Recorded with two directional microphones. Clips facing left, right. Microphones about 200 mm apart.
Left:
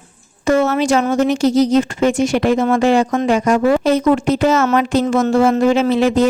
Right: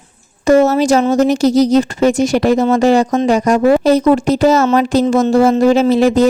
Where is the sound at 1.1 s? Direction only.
40° right (ahead or behind).